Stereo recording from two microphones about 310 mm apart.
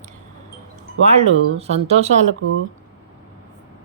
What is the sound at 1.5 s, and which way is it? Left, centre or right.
Speech, centre.